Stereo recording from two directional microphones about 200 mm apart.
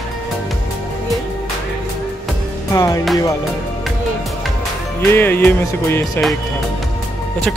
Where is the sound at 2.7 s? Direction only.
15° left (ahead or behind).